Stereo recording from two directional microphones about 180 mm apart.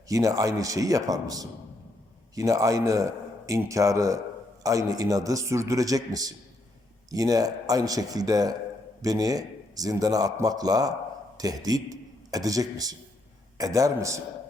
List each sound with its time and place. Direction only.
0.1 s a man's voice: 20° right (ahead or behind)